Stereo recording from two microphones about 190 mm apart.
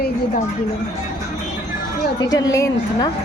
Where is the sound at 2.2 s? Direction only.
20° left (ahead or behind).